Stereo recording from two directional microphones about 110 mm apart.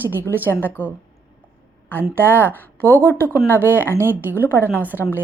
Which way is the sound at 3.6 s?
20° right (ahead or behind).